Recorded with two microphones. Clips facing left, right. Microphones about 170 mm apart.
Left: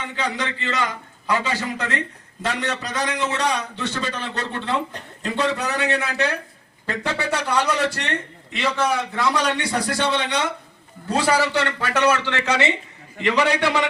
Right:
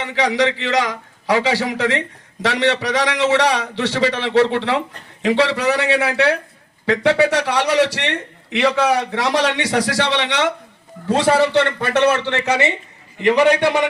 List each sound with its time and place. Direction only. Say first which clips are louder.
0.0 s a man's voice: right 9 dB; 90° right
11.9 s speech: right 4 dB; 20° right (ahead or behind)